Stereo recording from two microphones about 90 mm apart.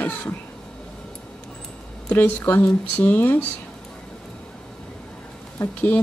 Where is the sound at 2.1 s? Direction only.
15° left (ahead or behind).